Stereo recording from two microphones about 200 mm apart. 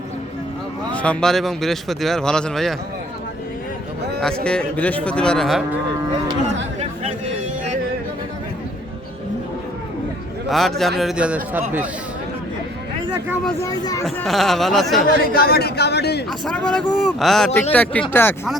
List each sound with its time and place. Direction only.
0.9 s speech: 5° left (ahead or behind)
4.4 s speech: 5° left (ahead or behind)
10.5 s speech: centre (ahead or behind)
13.2 s speech: 5° right (ahead or behind)
13.6 s speech: 15° left (ahead or behind)
14.2 s speech: centre (ahead or behind)
15.3 s speech: 50° left (ahead or behind)
16.5 s speech: 5° left (ahead or behind)